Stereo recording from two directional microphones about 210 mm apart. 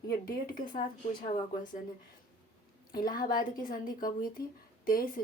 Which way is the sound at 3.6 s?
40° left (ahead or behind).